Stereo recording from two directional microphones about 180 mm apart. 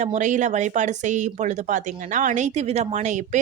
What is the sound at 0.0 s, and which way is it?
Speech, 40° right (ahead or behind).